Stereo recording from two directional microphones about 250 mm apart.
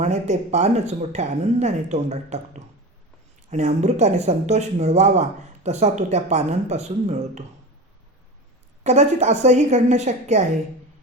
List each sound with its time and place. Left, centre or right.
0.0 s speech: right
8.8 s speech: right